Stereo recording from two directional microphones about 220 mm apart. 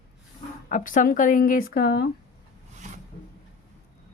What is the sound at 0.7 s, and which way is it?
Speech, 35° left (ahead or behind).